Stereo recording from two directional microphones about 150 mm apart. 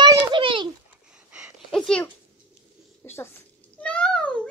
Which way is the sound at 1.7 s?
5° left (ahead or behind).